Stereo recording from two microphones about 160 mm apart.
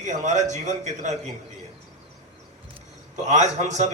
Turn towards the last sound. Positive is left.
turn(degrees=-45)  # may be behind; listen again after turning